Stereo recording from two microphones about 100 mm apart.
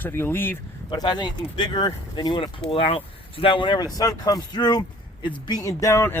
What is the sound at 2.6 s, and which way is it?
Speech, 70° left (ahead or behind).